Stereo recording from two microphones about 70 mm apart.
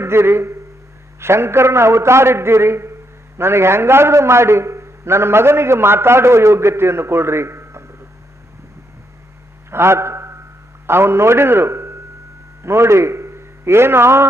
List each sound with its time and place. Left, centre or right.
0.0 s a man's voice: right
9.7 s a man's voice: right